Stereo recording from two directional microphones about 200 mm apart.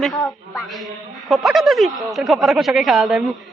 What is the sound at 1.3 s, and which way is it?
A woman's voice, centre (ahead or behind).